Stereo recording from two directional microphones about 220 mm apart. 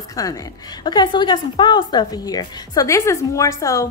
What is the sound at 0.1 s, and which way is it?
A woman's voice, 15° left (ahead or behind).